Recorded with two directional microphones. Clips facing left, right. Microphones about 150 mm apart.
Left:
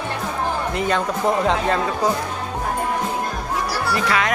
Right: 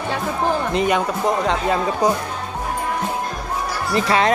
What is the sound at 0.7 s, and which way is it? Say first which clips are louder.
Speech: right 2 dB; 15° right (ahead or behind).